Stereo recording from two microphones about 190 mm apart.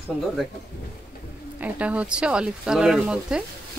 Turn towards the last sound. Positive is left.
turn(degrees=-5)  # may be behind; listen again after turning